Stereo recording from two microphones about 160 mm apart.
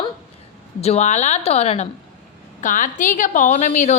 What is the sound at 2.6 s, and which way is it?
A woman's voice, 55° left (ahead or behind).